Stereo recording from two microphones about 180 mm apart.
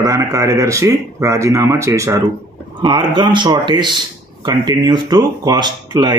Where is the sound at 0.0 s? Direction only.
15° right (ahead or behind).